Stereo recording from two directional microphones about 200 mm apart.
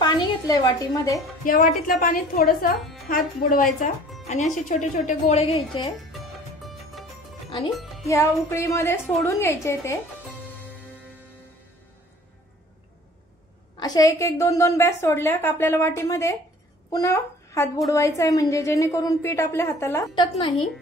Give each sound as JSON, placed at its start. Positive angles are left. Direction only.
{"t": 0.0, "sound": "a woman's voice", "side_deg": 20}
{"t": 1.4, "sound": "a woman's voice", "side_deg": 45}
{"t": 8.1, "sound": "a woman's voice", "side_deg": 15}
{"t": 13.7, "sound": "a woman's voice", "side_deg": 20}
{"t": 20.3, "sound": "a woman's voice", "side_deg": 30}